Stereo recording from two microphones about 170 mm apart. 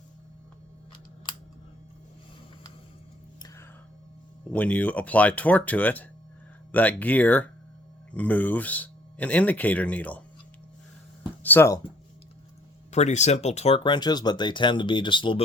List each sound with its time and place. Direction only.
3.4 s music: 20° left (ahead or behind)
4.5 s speech: 10° left (ahead or behind)
11.4 s speech: 15° left (ahead or behind)
12.9 s speech: 40° left (ahead or behind)